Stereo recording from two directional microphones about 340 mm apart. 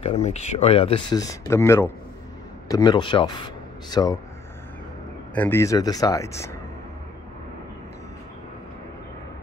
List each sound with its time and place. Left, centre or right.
0.0 s speech: centre
5.3 s speech: centre